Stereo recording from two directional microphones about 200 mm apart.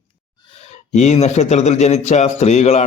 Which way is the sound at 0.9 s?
35° left (ahead or behind).